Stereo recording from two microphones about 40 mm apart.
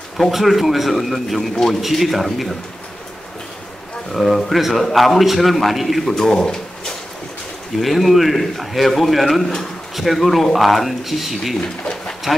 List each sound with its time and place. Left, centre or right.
0.3 s a man's voice: centre
4.1 s a man's voice: centre
6.1 s speech: centre
7.8 s a man's voice: centre
11.6 s pigeon: centre